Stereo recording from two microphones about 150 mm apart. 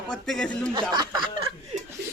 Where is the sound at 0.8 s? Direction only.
30° right (ahead or behind).